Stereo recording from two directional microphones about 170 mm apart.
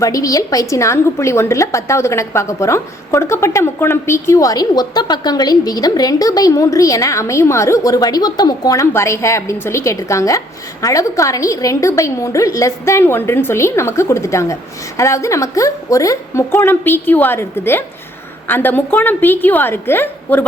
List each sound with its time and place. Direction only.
0.0 s a woman's voice: 20° left (ahead or behind)